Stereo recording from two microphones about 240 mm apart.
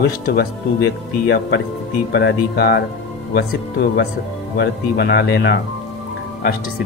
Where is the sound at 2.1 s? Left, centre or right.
Left.